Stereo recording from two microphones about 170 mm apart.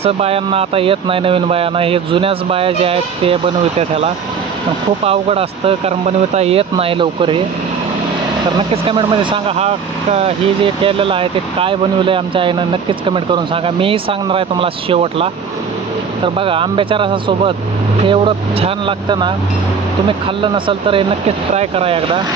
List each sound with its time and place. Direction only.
0.0 s speech: 35° right (ahead or behind)
8.8 s speech: 30° right (ahead or behind)
16.3 s speech: 30° right (ahead or behind)